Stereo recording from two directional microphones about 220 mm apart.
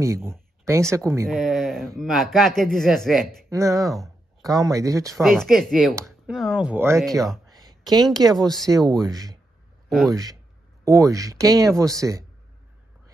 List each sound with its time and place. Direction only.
0.0 s speech: 10° right (ahead or behind)
1.2 s speech: centre (ahead or behind)
3.4 s speech: 15° right (ahead or behind)
5.1 s speech: centre (ahead or behind)
7.5 s a sound: 15° right (ahead or behind)
8.4 s speech: centre (ahead or behind)
8.6 s speech: 15° right (ahead or behind)
9.8 s speech: centre (ahead or behind)
10.1 s speech: 15° right (ahead or behind)